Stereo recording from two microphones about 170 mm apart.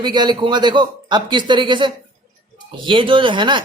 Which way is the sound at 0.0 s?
25° right (ahead or behind).